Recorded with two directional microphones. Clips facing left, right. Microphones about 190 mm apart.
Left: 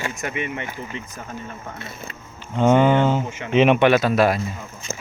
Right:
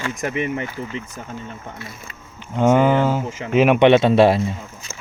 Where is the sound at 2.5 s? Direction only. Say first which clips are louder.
Even; 10° right (ahead or behind).